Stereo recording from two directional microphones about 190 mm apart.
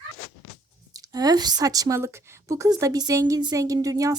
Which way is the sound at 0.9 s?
20° right (ahead or behind).